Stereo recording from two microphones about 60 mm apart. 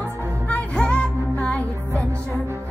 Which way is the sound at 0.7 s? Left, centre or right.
Centre.